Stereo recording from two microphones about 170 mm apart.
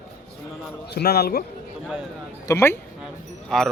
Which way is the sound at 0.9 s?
70° left (ahead or behind).